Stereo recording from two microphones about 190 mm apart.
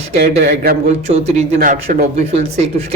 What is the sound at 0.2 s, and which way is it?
Speech, 50° right (ahead or behind).